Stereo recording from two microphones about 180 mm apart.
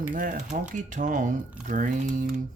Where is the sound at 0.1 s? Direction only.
50° right (ahead or behind).